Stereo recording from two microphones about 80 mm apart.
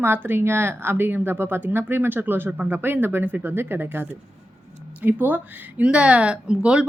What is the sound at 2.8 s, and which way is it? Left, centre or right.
A woman's voice, right.